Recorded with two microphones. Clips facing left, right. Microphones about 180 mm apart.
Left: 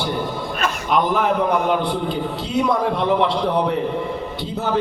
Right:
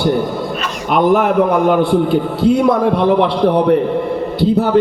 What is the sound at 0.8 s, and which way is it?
Speech, 50° right (ahead or behind).